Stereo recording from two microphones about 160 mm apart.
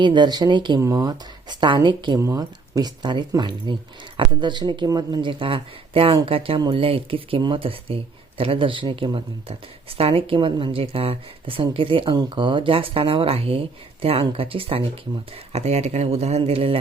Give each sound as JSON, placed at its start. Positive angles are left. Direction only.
{"t": 0.0, "sound": "speech", "side_deg": -30}